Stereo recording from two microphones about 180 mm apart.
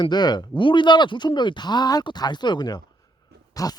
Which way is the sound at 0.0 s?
25° left (ahead or behind).